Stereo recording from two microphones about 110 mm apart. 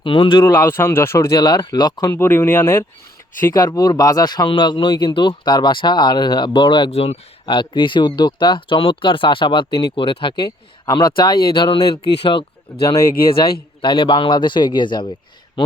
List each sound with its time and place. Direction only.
0.0 s speech: 50° left (ahead or behind)
0.4 s speech: 25° left (ahead or behind)
1.4 s speech: 40° left (ahead or behind)
2.1 s speech: 20° left (ahead or behind)
3.5 s speech: 35° left (ahead or behind)
6.9 s speech: 65° left (ahead or behind)
7.4 s speech: 45° left (ahead or behind)
10.0 s speech: 55° left (ahead or behind)
12.0 s speech: 55° left (ahead or behind)